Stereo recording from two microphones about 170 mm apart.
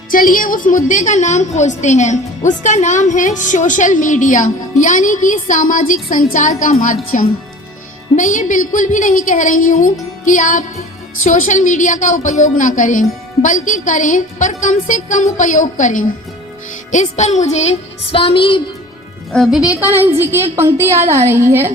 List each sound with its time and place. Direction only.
0.1 s a woman's voice: 55° left (ahead or behind); by 18.6 s 30° left (ahead or behind)
19.3 s speech: centre (ahead or behind)
19.9 s a woman's voice: 15° right (ahead or behind)